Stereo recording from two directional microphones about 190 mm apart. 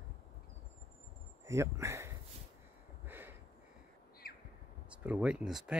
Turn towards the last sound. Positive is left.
turn(degrees=-5)  # may be behind; listen again after turning